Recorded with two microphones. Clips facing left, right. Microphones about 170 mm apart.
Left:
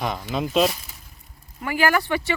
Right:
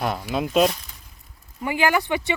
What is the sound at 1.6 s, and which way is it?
Speech, 20° right (ahead or behind).